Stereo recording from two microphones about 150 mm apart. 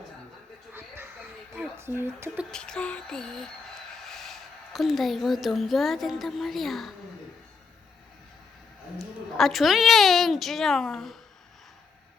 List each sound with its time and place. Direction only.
0.7 s music: 15° right (ahead or behind)
1.5 s speech: 15° right (ahead or behind)
2.5 s a sound: 5° left (ahead or behind)
9.0 s a woman's voice: centre (ahead or behind)